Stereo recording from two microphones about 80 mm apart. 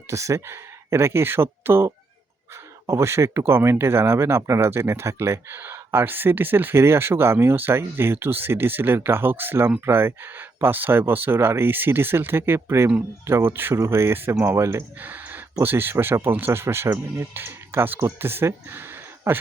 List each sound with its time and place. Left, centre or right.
0.1 s speech: right